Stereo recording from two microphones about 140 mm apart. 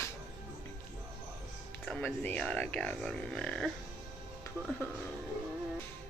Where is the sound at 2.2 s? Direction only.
10° left (ahead or behind).